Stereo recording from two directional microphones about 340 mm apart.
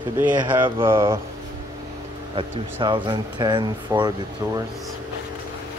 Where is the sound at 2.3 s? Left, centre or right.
Centre.